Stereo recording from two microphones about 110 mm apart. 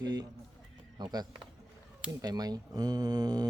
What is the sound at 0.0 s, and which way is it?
Speech, 35° right (ahead or behind).